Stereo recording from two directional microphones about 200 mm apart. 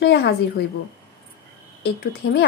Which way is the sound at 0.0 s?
55° left (ahead or behind).